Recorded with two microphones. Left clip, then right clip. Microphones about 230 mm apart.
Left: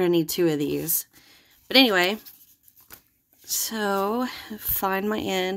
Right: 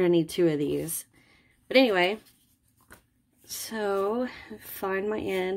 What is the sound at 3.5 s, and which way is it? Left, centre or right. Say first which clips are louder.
Speech: left 4 dB; centre.